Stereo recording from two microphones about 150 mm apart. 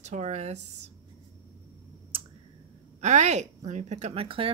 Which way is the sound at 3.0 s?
50° right (ahead or behind).